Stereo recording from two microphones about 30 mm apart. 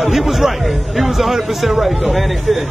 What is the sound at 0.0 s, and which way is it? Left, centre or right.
A man's voice, centre.